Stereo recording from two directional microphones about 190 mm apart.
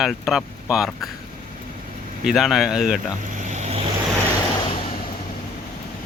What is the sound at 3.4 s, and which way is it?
Vehicle, 40° right (ahead or behind).